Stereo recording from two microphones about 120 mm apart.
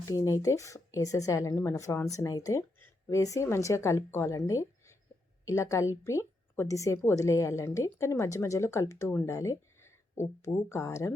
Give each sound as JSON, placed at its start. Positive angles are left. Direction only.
{"t": 0.0, "sound": "speech", "side_deg": 25}